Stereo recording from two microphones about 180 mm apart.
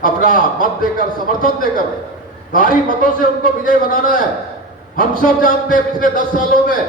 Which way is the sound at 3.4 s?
50° left (ahead or behind).